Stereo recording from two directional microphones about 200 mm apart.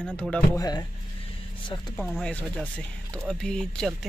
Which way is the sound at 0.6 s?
20° left (ahead or behind).